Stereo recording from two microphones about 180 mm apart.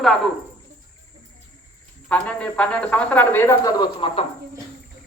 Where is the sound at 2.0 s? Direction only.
5° left (ahead or behind); by 4.3 s 25° left (ahead or behind).